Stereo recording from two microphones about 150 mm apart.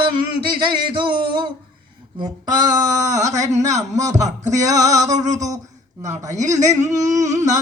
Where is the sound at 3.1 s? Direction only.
50° right (ahead or behind).